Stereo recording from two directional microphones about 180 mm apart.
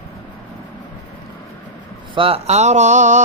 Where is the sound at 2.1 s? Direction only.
30° right (ahead or behind).